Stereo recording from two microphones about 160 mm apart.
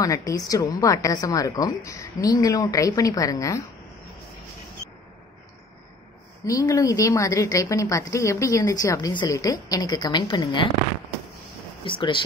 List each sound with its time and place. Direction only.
0.3 s a woman's voice: 20° left (ahead or behind)
6.4 s a woman's voice: 20° left (ahead or behind)
11.8 s speech: 30° left (ahead or behind)